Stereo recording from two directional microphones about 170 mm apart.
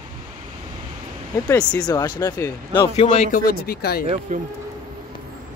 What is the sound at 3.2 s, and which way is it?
Speech, 55° left (ahead or behind).